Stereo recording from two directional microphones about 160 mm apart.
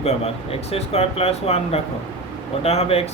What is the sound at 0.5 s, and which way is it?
Speech, 40° left (ahead or behind).